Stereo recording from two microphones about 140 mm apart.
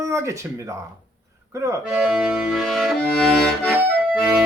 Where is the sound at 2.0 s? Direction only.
5° right (ahead or behind).